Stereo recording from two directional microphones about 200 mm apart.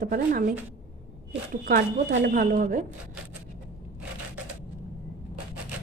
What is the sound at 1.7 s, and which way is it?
A woman's voice, 45° right (ahead or behind).